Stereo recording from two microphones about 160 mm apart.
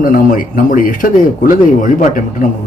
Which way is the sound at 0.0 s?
60° left (ahead or behind).